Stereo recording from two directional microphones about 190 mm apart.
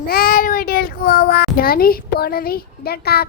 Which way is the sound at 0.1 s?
50° left (ahead or behind).